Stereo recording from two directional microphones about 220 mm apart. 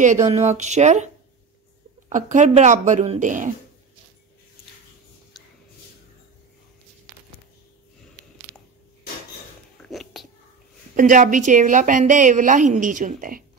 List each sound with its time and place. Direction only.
0.3 s a woman's voice: 30° right (ahead or behind)
9.8 s cat: centre (ahead or behind)
11.0 s a woman's voice: 35° right (ahead or behind)